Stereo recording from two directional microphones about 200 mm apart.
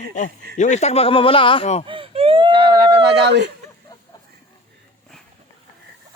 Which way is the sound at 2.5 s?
55° right (ahead or behind).